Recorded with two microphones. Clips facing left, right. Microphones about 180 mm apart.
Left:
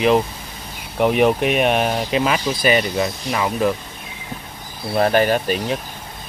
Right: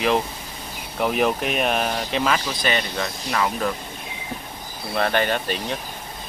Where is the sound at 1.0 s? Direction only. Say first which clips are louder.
Left 6 dB; centre (ahead or behind).